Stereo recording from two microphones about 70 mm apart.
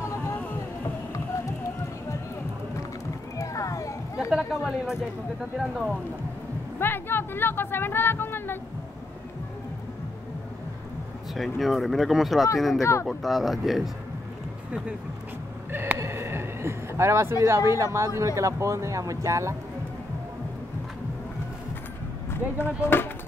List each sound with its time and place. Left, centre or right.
3.3 s music: left
4.3 s speech: centre
6.8 s speech: left
11.3 s speech: centre
15.7 s a sound: right
16.0 s speech: right
22.4 s speech: right
22.8 s speech: left